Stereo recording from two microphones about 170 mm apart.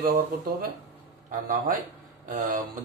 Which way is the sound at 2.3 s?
50° right (ahead or behind).